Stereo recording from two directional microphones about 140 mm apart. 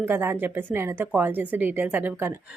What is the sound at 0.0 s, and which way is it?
Speech, 15° right (ahead or behind).